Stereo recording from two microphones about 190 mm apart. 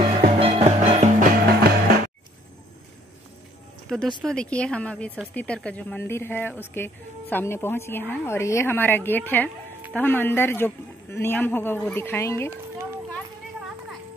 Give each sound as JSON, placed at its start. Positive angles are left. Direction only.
{"t": 0.2, "sound": "music", "side_deg": -35}
{"t": 1.6, "sound": "music", "side_deg": -55}
{"t": 4.2, "sound": "a woman's voice", "side_deg": 5}